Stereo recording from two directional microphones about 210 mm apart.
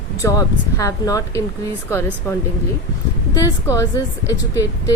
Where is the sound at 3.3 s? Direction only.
15° left (ahead or behind).